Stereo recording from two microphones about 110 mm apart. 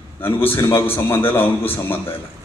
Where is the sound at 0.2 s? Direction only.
20° left (ahead or behind).